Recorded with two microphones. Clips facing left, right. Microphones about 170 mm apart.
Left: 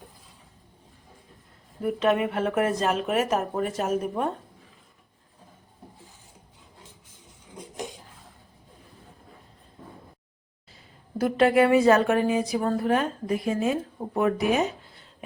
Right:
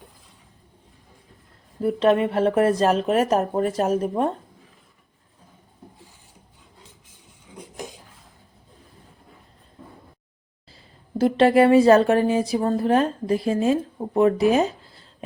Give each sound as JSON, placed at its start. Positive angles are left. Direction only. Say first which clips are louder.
{"t": 1.8, "sound": "speech", "louder": "right 4 dB", "side_deg": -30}
{"t": 11.2, "sound": "speech", "louder": "right 4 dB", "side_deg": -25}